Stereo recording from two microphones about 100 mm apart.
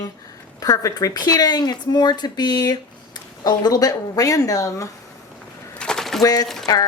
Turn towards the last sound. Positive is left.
turn(degrees=40)  # may be behind; listen again after turning